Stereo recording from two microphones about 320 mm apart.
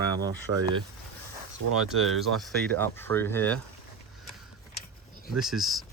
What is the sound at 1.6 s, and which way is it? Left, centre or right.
Speech, right.